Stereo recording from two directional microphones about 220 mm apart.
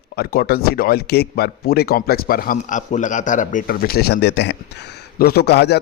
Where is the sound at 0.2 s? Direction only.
45° left (ahead or behind).